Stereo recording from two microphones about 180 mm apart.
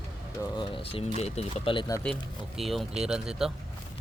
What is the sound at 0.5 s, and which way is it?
Speech, 25° left (ahead or behind).